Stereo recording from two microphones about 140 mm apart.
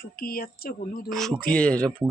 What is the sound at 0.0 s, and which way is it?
Speech, 90° left.